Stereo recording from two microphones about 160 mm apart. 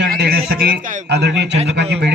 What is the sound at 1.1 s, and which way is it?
A man's voice, 90° right.